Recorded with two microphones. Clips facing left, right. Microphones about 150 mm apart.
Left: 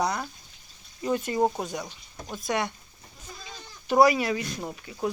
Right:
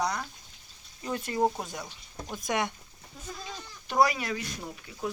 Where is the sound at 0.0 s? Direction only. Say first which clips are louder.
Left 3 dB; 10° left (ahead or behind).